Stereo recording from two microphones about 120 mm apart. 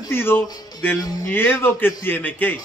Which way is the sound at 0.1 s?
20° left (ahead or behind).